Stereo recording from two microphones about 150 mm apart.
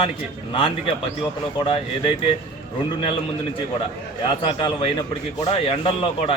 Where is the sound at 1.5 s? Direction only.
35° left (ahead or behind).